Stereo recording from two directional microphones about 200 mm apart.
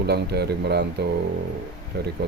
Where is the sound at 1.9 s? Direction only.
55° right (ahead or behind).